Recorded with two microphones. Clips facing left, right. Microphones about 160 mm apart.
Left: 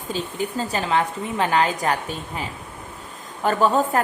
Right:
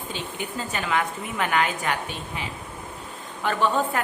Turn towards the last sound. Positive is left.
turn(degrees=40)  # may be behind; listen again after turning